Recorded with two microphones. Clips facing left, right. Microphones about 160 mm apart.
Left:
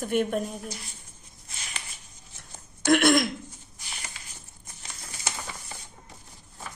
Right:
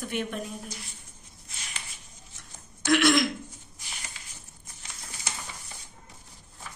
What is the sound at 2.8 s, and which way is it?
Speech, 50° left (ahead or behind).